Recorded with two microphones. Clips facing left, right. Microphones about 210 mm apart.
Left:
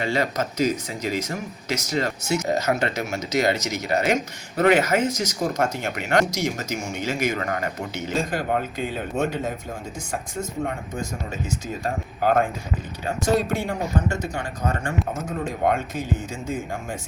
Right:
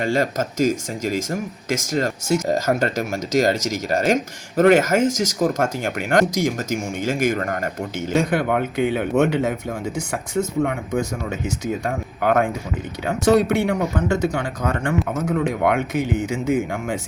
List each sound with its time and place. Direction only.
0.0 s speech: 45° right (ahead or behind)
8.2 s speech: 70° right (ahead or behind)